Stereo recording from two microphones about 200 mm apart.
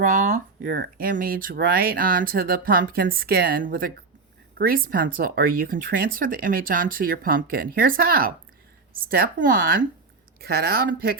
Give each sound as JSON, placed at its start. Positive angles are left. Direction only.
{"t": 0.0, "sound": "speech", "side_deg": -40}